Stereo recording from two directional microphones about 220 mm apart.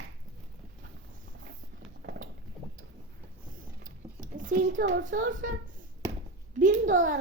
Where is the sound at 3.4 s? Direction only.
35° right (ahead or behind).